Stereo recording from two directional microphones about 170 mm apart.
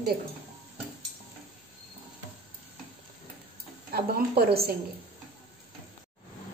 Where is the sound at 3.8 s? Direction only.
65° right (ahead or behind).